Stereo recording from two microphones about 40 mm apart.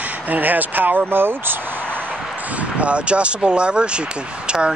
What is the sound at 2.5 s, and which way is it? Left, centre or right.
Speech, right.